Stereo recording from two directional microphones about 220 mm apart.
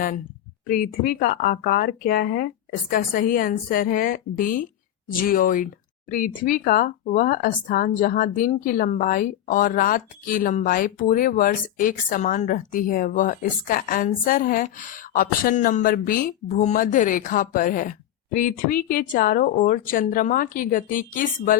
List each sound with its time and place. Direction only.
0.7 s speech: 40° left (ahead or behind)